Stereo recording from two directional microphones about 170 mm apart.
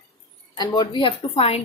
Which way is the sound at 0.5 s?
25° left (ahead or behind).